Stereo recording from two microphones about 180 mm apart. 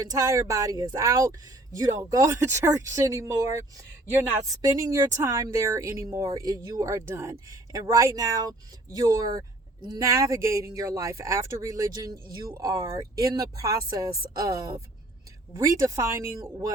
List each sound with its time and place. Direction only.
0.0 s speech: 20° right (ahead or behind)